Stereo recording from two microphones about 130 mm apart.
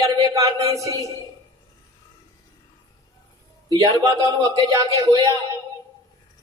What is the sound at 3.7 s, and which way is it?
Speech, 25° right (ahead or behind).